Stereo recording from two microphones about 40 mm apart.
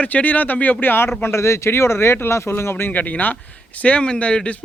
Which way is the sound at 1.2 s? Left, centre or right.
Left.